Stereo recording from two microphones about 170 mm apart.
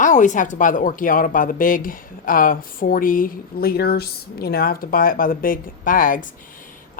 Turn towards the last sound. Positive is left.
turn(degrees=55)  # may be behind; listen again after turning